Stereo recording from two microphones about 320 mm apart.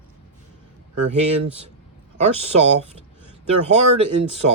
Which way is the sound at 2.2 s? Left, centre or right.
Centre.